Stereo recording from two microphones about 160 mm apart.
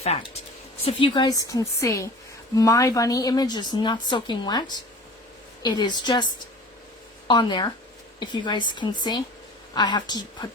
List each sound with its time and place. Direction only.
0.0 s a woman's voice: 40° left (ahead or behind)